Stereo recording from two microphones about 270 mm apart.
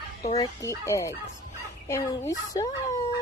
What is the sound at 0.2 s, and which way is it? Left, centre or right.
Speech, left.